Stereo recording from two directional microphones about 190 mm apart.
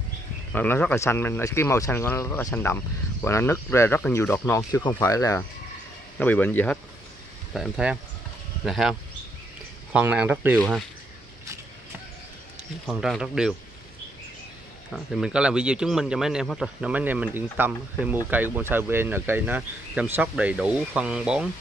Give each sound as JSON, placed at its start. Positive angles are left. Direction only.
{"t": 0.5, "sound": "speech", "side_deg": 10}
{"t": 7.5, "sound": "speech", "side_deg": 0}
{"t": 9.9, "sound": "speech", "side_deg": -10}
{"t": 12.8, "sound": "speech", "side_deg": 0}
{"t": 14.9, "sound": "speech", "side_deg": 0}